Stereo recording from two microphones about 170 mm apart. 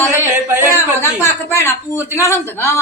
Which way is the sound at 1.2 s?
15° left (ahead or behind).